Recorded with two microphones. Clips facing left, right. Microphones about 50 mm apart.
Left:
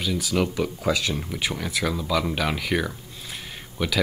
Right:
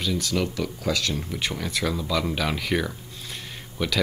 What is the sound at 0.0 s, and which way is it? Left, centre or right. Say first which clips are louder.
Speech: left 1 dB; centre.